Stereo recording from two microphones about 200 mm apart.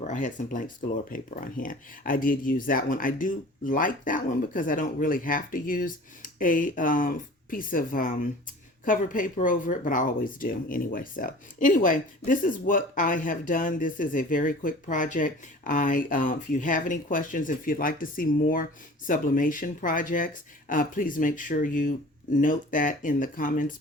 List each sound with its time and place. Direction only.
0.0 s speech: 40° left (ahead or behind)